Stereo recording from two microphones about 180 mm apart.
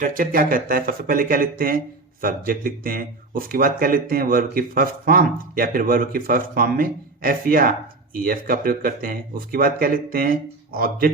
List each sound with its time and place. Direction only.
0.0 s speech: 50° right (ahead or behind)